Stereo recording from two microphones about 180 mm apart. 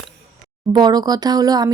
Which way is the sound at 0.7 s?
25° right (ahead or behind).